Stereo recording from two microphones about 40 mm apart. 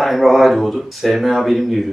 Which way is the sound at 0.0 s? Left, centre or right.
Centre.